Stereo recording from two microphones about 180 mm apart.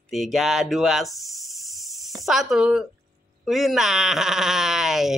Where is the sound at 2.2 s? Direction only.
Centre (ahead or behind).